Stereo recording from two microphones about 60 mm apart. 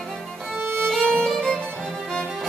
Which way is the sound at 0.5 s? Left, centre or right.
Right.